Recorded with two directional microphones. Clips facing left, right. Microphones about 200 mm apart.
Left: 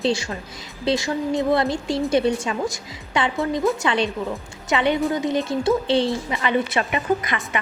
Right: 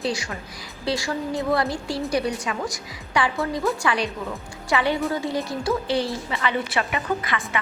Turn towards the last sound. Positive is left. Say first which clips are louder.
# left 3 dB
turn(degrees=20)  # may be behind; listen again after turning